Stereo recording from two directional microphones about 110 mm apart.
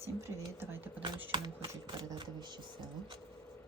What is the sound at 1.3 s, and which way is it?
Typing, 40° right (ahead or behind).